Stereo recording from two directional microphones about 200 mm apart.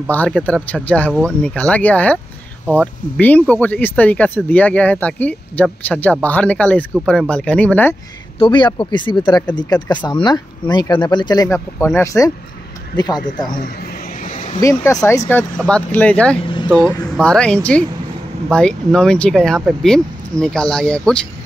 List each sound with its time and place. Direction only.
0.1 s speech: 10° left (ahead or behind)
8.4 s speech: 25° left (ahead or behind)
14.6 s speech: 15° left (ahead or behind)
16.3 s speech: 25° left (ahead or behind)
17.2 s speech: 5° left (ahead or behind)